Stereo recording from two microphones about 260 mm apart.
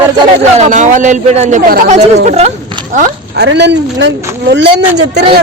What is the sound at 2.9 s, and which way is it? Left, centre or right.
Speech, right.